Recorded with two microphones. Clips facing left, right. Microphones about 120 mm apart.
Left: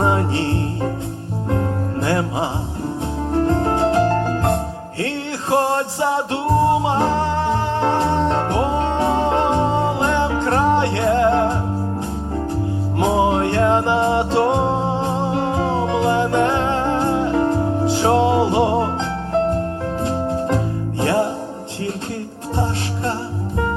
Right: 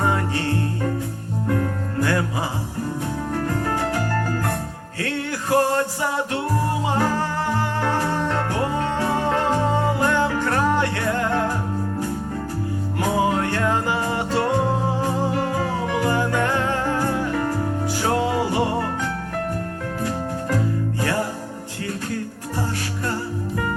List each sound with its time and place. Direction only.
0.0 s music: 25° left (ahead or behind)
13.0 s music: 25° left (ahead or behind)